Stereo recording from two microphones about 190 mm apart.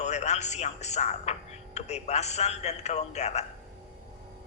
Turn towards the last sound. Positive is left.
turn(degrees=35)  # may be behind; listen again after turning